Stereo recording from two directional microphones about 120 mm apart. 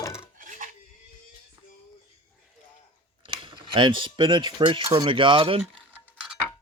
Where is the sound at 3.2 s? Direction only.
45° right (ahead or behind).